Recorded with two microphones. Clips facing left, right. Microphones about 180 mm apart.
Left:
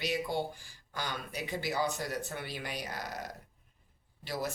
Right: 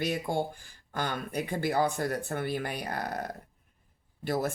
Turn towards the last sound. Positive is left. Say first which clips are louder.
# right 7 dB
turn(degrees=-50)  # may be behind; listen again after turning